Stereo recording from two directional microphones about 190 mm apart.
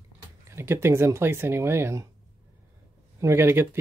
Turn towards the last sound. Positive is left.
turn(degrees=-10)  # may be behind; listen again after turning